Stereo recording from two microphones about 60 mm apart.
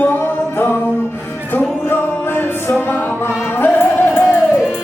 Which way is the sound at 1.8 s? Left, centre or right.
Left.